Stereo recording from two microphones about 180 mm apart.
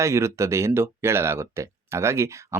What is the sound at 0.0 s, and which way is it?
Speech, 15° right (ahead or behind).